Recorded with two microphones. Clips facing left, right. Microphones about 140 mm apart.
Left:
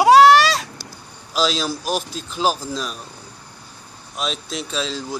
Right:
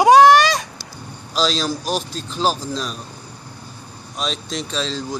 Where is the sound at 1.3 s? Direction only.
10° left (ahead or behind).